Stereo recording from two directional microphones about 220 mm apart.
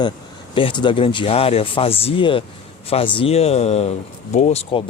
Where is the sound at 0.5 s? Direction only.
20° left (ahead or behind).